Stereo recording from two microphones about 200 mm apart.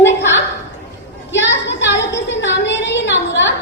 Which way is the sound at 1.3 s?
65° left (ahead or behind).